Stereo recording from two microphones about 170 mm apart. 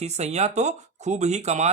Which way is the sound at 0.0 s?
40° right (ahead or behind).